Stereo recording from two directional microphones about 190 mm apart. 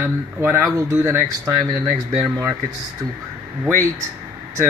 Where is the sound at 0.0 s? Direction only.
10° right (ahead or behind).